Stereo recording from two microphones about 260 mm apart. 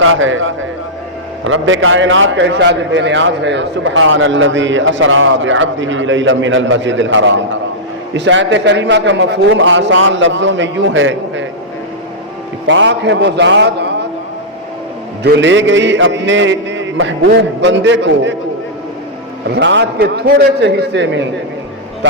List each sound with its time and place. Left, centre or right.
0.0 s a man's voice: right
1.5 s a man's voice: right
12.6 s a man's voice: right
15.2 s a man's voice: right
19.5 s a man's voice: right